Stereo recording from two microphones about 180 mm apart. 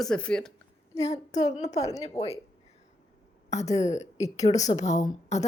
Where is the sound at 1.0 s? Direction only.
40° left (ahead or behind).